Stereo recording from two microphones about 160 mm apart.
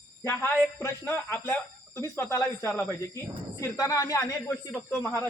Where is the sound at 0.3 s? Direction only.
15° left (ahead or behind).